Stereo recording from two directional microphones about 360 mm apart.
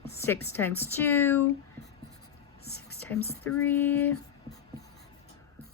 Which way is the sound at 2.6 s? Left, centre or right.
Left.